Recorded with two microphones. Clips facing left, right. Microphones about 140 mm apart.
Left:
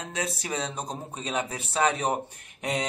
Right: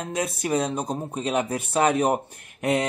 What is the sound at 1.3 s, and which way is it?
Speech, 55° right (ahead or behind).